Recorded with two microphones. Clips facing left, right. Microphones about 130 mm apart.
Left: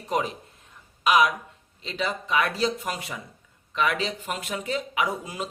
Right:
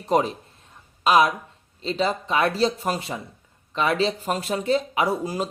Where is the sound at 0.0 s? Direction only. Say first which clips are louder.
Right 6 dB; 35° right (ahead or behind).